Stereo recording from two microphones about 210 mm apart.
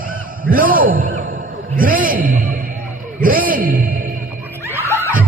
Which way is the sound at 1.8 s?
40° right (ahead or behind).